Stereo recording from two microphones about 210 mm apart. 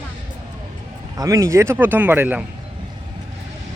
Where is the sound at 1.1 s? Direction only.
15° right (ahead or behind).